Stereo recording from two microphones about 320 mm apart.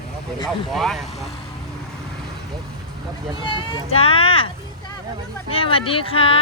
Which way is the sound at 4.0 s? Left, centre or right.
Centre.